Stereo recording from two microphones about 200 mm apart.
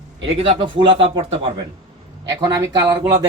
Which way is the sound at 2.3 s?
20° right (ahead or behind).